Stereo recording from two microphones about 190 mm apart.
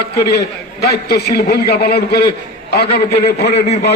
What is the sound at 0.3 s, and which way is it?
A man's voice, 55° left (ahead or behind).